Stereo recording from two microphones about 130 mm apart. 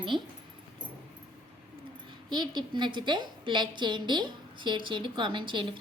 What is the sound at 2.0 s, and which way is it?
A woman's voice, 35° right (ahead or behind).